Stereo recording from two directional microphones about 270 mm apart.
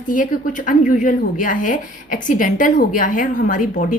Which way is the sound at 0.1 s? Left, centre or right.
Left.